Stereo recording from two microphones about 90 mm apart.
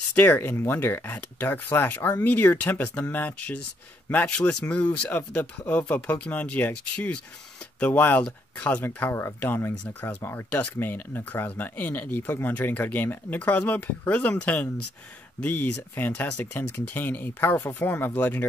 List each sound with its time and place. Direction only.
0.1 s speech: 20° left (ahead or behind)